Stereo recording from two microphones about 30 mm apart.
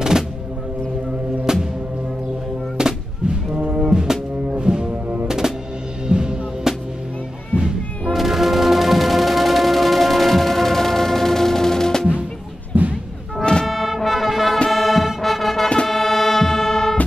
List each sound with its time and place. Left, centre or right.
1.4 s music: centre
2.8 s gunshot: right
3.5 s music: right
3.8 s music: right
5.4 s drum: centre
6.0 s music: right
8.1 s music: centre
12.7 s music: right
13.7 s music: centre